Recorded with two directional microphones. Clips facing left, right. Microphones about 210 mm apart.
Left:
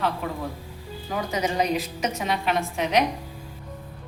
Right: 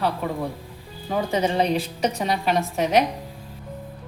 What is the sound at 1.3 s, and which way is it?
A woman's voice, 30° right (ahead or behind).